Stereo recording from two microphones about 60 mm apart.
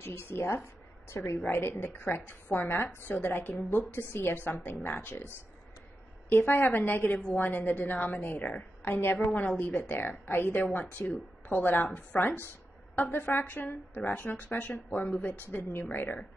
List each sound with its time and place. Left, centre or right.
0.0 s a woman's voice: left
6.2 s a woman's voice: left